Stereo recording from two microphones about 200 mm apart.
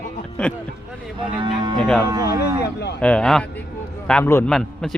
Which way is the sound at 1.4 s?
20° right (ahead or behind).